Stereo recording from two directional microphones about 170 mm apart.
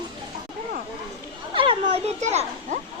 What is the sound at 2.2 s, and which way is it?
Children playing, 40° right (ahead or behind).